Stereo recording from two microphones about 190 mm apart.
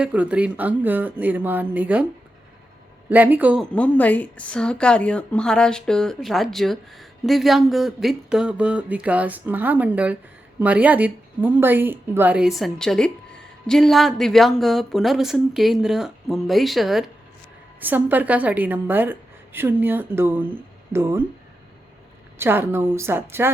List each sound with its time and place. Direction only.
0.0 s speech: 5° right (ahead or behind)
3.1 s speech: 10° right (ahead or behind)
3.7 s a woman's voice: 10° left (ahead or behind); by 21.2 s 15° right (ahead or behind)
22.4 s speech: 10° right (ahead or behind)